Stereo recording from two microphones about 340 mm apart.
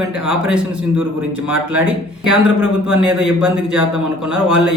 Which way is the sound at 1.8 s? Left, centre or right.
Centre.